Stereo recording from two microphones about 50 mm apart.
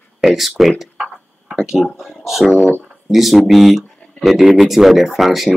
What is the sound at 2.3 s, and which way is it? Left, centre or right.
Speech, centre.